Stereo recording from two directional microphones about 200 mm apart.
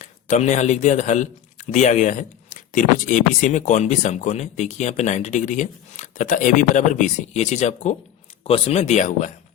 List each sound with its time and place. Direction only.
0.0 s a man's voice: 35° left (ahead or behind)